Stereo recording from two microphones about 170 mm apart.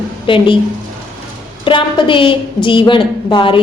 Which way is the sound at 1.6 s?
30° left (ahead or behind).